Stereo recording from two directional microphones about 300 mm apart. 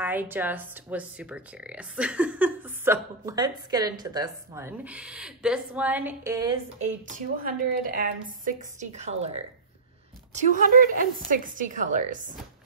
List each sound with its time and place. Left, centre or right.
0.0 s speech: centre
6.8 s a woman's voice: right
10.3 s a woman's voice: right